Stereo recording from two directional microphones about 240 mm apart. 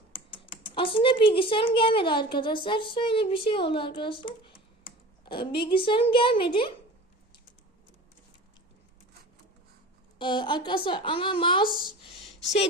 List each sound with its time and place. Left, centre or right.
0.7 s a woman's voice: left
10.2 s a woman's voice: centre